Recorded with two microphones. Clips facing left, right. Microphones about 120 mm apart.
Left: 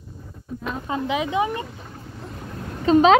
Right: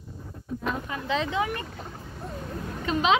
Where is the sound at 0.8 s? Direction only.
25° left (ahead or behind).